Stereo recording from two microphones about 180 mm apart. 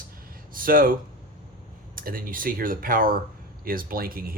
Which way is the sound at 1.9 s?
55° right (ahead or behind).